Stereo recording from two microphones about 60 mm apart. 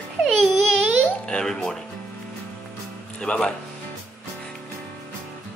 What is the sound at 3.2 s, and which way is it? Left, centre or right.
Music, centre.